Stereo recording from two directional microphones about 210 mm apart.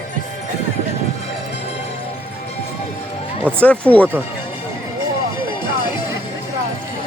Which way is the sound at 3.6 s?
5° left (ahead or behind).